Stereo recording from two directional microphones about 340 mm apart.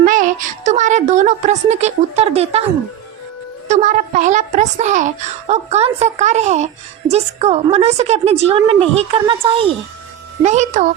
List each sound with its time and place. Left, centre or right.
0.0 s a woman's voice: right
3.7 s a woman's voice: right